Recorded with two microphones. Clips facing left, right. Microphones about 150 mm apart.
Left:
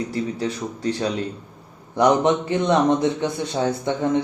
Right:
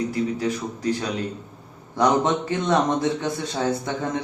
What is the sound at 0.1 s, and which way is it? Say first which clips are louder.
Speech: right 1 dB; 30° left (ahead or behind).